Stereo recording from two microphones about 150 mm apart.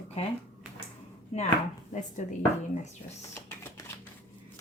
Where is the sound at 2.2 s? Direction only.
50° left (ahead or behind).